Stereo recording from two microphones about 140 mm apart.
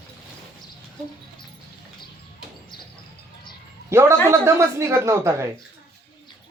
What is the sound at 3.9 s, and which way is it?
Speech, 20° right (ahead or behind).